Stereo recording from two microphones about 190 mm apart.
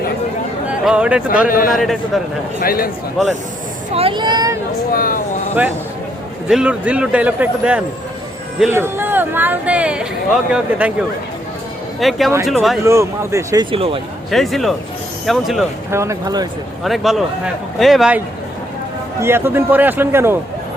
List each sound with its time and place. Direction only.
0.7 s speech: 5° right (ahead or behind)
1.5 s speech: 45° left (ahead or behind)
1.8 s a man's voice: centre (ahead or behind)
2.6 s speech: 50° left (ahead or behind)
3.9 s speech: 25° right (ahead or behind)
4.9 s speech: 50° left (ahead or behind)
6.5 s speech: 5° right (ahead or behind)
11.9 s a man's voice: centre (ahead or behind)
12.8 s speech: 15° right (ahead or behind)
14.3 s a man's voice: centre (ahead or behind)
15.9 s speech: 15° right (ahead or behind)
16.8 s a man's voice: centre (ahead or behind)
19.2 s speech: 10° right (ahead or behind)